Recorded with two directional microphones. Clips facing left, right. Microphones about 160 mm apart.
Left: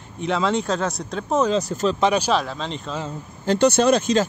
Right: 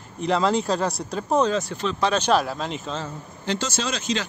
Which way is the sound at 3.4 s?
55° left (ahead or behind).